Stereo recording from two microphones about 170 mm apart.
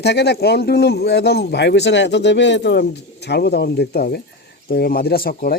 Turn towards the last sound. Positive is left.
turn(degrees=60)  # may be behind; listen again after turning